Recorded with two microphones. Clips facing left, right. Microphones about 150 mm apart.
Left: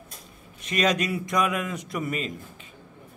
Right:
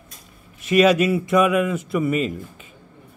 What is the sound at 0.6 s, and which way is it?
A man's voice, 5° right (ahead or behind).